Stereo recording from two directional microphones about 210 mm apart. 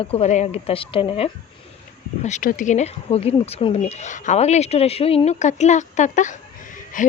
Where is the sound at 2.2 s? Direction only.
40° left (ahead or behind).